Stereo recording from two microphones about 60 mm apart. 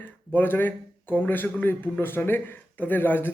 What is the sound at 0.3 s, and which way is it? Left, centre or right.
A man's voice, left.